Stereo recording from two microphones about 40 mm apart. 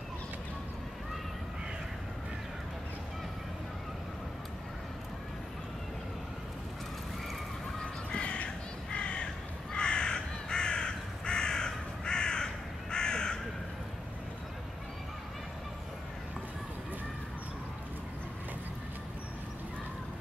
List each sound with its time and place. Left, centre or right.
8.1 s crow: left